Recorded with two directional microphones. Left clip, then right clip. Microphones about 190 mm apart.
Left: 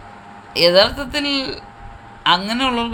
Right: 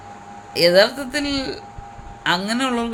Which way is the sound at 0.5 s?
10° right (ahead or behind).